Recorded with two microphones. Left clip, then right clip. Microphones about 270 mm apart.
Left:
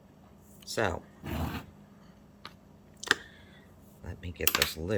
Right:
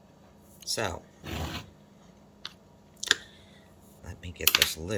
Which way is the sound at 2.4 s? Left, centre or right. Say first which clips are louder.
Right 5 dB; left.